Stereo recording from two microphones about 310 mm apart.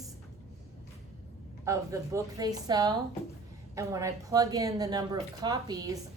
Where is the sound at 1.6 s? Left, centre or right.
Centre.